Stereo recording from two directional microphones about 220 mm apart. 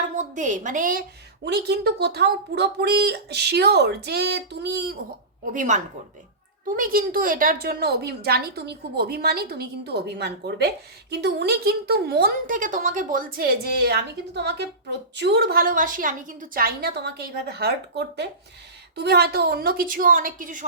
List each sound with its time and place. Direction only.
0.2 s a woman's voice: 35° right (ahead or behind)
1.5 s speech: 50° right (ahead or behind)
5.5 s a woman's voice: 35° right (ahead or behind)